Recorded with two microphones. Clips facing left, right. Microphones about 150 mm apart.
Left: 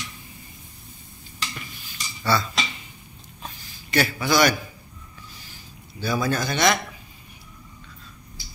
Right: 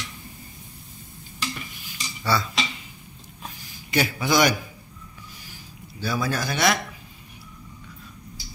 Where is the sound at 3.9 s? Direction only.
15° right (ahead or behind).